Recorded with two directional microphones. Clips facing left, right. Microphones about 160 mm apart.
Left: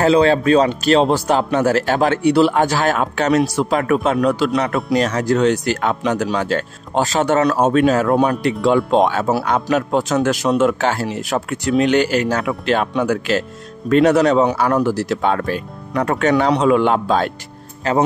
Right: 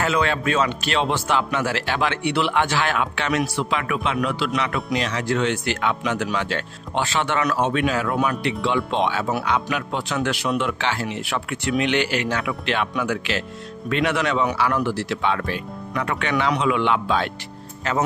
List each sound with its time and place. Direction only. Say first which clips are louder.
0.0 s speech: left 9 dB; 35° left (ahead or behind)